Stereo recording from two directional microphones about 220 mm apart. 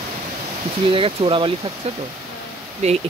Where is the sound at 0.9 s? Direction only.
25° right (ahead or behind).